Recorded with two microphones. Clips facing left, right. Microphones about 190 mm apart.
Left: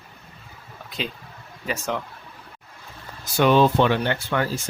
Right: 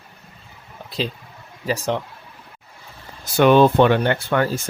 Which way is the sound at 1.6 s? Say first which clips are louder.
Right 5 dB; 35° right (ahead or behind).